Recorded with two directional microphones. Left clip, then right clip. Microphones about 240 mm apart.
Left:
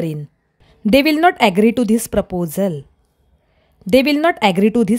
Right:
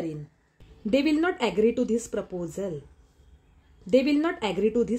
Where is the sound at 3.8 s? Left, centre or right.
Left.